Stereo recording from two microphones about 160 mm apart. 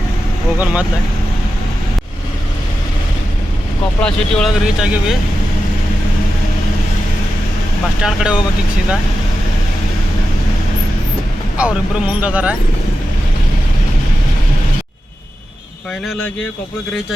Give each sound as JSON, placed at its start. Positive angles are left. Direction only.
{"t": 0.6, "sound": "speech", "side_deg": -10}
{"t": 4.0, "sound": "speech", "side_deg": 5}
{"t": 8.0, "sound": "speech", "side_deg": -5}
{"t": 11.5, "sound": "speech", "side_deg": -5}